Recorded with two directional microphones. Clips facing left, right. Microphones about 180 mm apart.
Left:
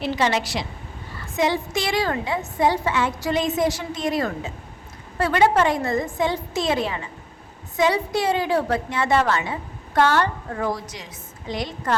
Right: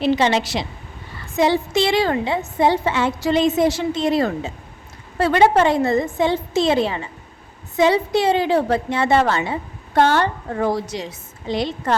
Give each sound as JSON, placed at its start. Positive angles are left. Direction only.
{"t": 0.0, "sound": "a woman's voice", "side_deg": -25}